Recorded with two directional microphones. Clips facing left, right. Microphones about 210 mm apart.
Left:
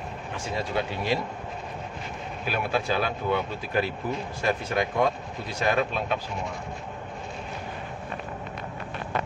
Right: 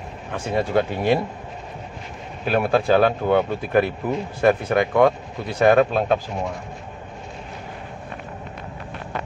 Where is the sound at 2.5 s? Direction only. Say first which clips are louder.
Right 9 dB; 55° right (ahead or behind).